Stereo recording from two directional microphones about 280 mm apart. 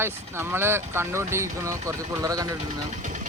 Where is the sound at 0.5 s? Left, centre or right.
Centre.